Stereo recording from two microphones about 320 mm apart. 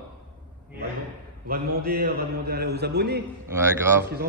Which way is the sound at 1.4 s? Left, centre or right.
Right.